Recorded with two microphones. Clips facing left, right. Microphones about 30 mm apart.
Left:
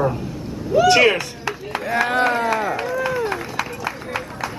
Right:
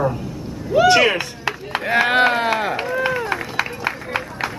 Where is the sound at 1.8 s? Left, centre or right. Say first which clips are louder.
Right 3 dB; right.